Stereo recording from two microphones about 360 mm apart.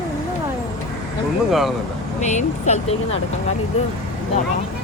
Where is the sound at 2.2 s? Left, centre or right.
Centre.